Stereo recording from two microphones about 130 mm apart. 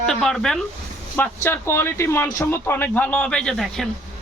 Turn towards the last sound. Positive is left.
turn(degrees=0)  # may be behind; listen again after turning